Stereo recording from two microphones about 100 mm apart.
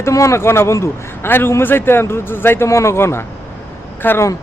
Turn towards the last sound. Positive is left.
turn(degrees=20)  # may be behind; listen again after turning